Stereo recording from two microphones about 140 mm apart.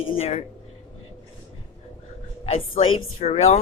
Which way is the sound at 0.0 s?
45° left (ahead or behind).